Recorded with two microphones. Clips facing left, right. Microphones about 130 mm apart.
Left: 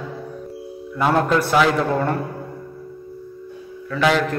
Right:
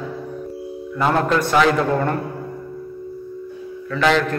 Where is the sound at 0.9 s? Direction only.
5° left (ahead or behind).